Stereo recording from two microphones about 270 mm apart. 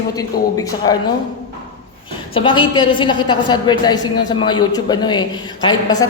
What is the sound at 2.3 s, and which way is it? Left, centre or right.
A woman's voice, centre.